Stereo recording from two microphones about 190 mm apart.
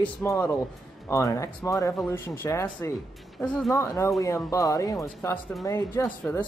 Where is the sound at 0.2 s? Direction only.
15° left (ahead or behind).